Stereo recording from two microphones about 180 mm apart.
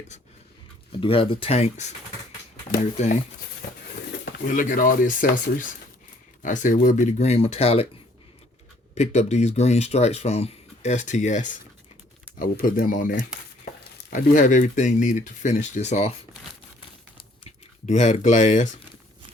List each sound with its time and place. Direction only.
0.9 s speech: 30° left (ahead or behind)
3.0 s speech: 40° left (ahead or behind)
4.3 s speech: 50° left (ahead or behind)
9.0 s speech: 40° left (ahead or behind)
17.8 s speech: 40° left (ahead or behind)